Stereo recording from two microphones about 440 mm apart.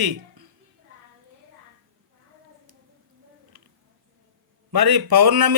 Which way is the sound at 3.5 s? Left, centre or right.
Right.